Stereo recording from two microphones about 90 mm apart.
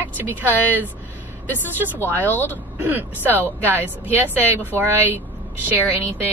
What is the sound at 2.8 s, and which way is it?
Speech, 20° right (ahead or behind).